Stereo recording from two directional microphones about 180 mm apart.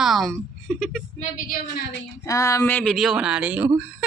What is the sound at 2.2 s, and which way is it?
Speech, 20° left (ahead or behind).